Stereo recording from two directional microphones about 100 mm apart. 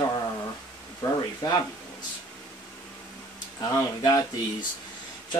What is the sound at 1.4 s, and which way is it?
Speech, 40° left (ahead or behind).